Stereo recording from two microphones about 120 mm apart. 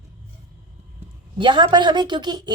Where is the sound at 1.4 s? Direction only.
40° right (ahead or behind).